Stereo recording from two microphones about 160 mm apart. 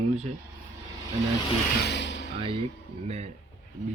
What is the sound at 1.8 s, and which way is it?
Music, 90° left.